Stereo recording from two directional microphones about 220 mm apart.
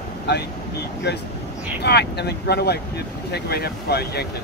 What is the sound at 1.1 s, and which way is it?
Speech, 50° left (ahead or behind).